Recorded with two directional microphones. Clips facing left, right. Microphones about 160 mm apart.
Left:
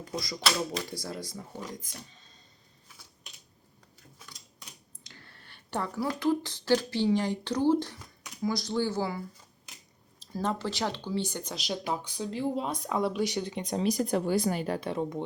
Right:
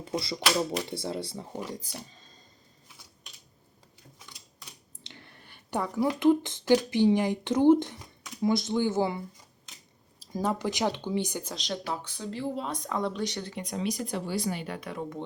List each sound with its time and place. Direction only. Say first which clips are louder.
0.2 s speech: right 2 dB; 30° right (ahead or behind)
5.0 s speech: right 3 dB; 20° right (ahead or behind)
10.3 s speech: right 2 dB; 10° right (ahead or behind)
11.5 s speech: left 3 dB; 10° left (ahead or behind)
13.7 s speech: left 5 dB; 45° left (ahead or behind)